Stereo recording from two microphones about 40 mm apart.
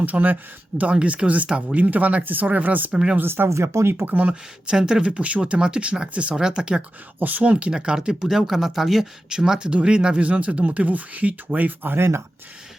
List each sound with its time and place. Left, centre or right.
0.0 s speech: right
0.9 s speech: right
2.2 s speech: right
2.9 s speech: right
3.2 s speech: right
4.0 s speech: right
4.7 s speech: centre
5.0 s speech: right
6.3 s speech: centre
7.2 s speech: right
7.4 s speech: right
7.7 s speech: centre
9.4 s speech: centre; by 11.9 s right
11.9 s speech: right